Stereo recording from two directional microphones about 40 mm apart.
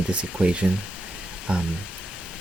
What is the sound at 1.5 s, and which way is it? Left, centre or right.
Speech, right.